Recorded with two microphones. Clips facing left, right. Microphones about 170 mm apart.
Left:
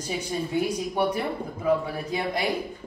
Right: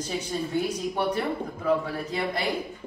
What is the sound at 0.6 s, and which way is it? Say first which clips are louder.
Speech: left 2 dB; 10° left (ahead or behind).